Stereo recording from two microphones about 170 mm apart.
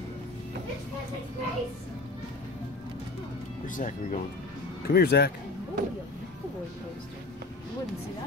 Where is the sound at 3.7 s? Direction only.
45° left (ahead or behind).